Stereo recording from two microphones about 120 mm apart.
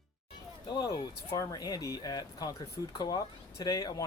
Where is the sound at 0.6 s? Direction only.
30° left (ahead or behind).